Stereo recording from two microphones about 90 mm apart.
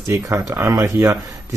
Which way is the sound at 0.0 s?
35° right (ahead or behind).